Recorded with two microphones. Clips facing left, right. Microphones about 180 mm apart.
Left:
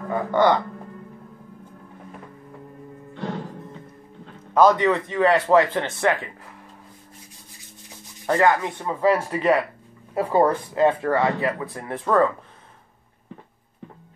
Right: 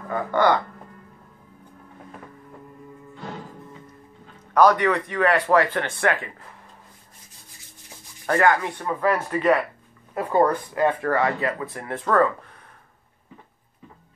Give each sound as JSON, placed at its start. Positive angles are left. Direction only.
{"t": 0.1, "sound": "speech", "side_deg": 20}
{"t": 4.6, "sound": "speech", "side_deg": 20}
{"t": 8.3, "sound": "speech", "side_deg": 20}